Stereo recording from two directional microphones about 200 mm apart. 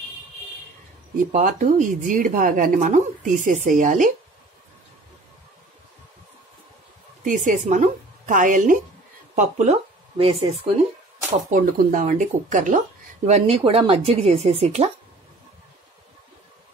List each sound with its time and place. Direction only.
1.1 s speech: 40° right (ahead or behind)
7.2 s a woman's voice: 40° right (ahead or behind)
11.3 s speech: 40° right (ahead or behind)